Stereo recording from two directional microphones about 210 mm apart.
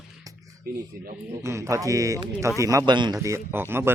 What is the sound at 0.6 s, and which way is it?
Speech, 45° right (ahead or behind).